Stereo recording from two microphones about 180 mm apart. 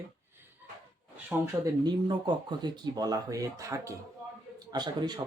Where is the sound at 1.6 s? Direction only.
25° right (ahead or behind).